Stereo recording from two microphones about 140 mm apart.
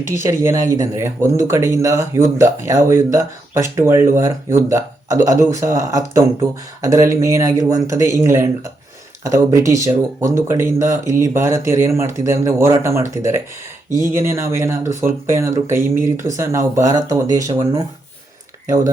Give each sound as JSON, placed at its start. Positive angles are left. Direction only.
{"t": 0.1, "sound": "speech", "side_deg": -20}